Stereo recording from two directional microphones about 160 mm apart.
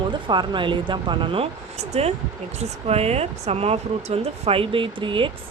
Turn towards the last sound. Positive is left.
turn(degrees=-30)  # may be behind; listen again after turning